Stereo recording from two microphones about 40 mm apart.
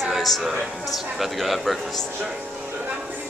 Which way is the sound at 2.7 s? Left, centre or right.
Right.